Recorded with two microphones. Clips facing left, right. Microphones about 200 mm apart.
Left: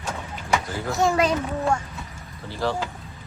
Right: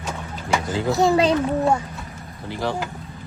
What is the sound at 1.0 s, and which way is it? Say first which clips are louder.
Speech: right 3 dB; 30° right (ahead or behind).